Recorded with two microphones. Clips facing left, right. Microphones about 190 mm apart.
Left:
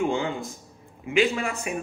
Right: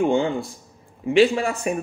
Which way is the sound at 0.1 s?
30° right (ahead or behind).